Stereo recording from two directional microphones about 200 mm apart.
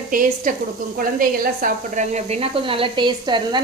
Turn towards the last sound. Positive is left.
turn(degrees=-20)  # may be behind; listen again after turning